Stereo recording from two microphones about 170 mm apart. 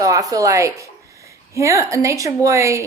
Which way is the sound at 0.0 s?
20° right (ahead or behind).